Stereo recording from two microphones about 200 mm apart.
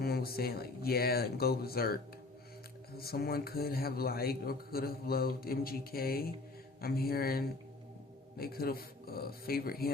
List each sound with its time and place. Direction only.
0.0 s speech: 50° left (ahead or behind)
3.0 s speech: 50° left (ahead or behind)